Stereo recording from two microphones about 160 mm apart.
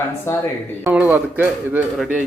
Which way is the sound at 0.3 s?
15° left (ahead or behind).